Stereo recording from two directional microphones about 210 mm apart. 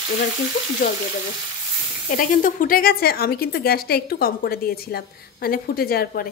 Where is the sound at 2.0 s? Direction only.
40° left (ahead or behind).